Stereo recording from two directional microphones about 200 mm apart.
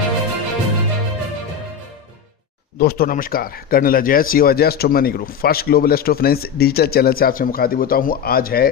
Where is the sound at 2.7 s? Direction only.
50° left (ahead or behind).